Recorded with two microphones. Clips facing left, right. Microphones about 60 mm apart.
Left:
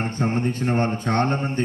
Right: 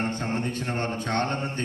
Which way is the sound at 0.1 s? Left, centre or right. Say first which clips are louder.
Left 5 dB; left.